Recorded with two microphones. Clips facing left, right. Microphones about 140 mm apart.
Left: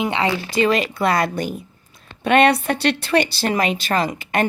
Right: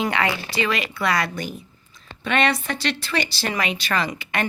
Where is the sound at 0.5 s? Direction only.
45° left (ahead or behind).